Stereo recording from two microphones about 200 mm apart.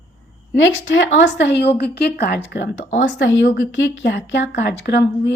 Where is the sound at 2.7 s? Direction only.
35° left (ahead or behind).